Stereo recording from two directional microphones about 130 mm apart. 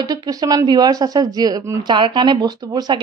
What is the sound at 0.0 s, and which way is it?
Speech, 30° right (ahead or behind).